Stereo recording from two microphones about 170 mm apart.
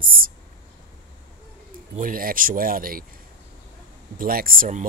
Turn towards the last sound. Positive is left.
turn(degrees=-50)  # may be behind; listen again after turning